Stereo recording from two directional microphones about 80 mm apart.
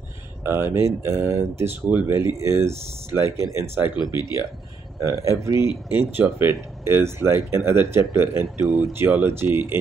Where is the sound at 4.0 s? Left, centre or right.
Left.